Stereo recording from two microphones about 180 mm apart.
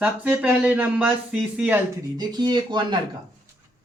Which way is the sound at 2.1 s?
25° right (ahead or behind).